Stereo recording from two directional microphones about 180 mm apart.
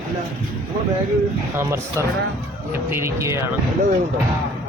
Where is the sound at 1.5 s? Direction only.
15° right (ahead or behind).